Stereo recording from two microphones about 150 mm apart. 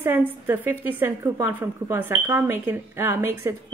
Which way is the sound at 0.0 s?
15° right (ahead or behind).